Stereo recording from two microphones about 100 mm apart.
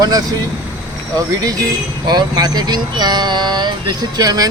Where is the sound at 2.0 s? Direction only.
45° right (ahead or behind).